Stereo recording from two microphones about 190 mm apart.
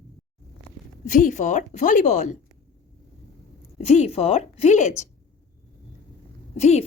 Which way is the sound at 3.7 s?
35° left (ahead or behind).